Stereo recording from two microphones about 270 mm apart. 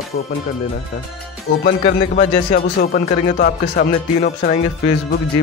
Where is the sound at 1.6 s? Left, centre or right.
Left.